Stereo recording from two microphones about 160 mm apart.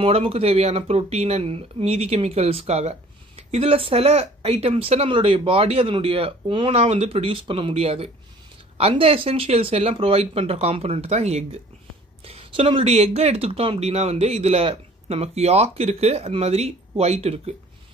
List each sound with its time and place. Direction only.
0.0 s speech: 35° right (ahead or behind)